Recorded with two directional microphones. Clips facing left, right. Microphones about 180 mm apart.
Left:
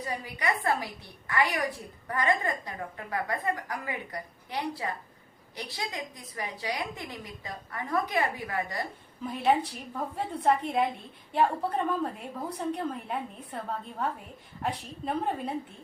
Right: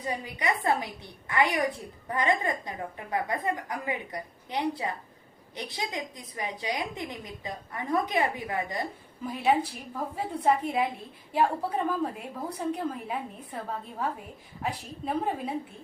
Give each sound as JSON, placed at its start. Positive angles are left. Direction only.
{"t": 0.0, "sound": "a woman's voice", "side_deg": -20}
{"t": 9.2, "sound": "a woman's voice", "side_deg": 0}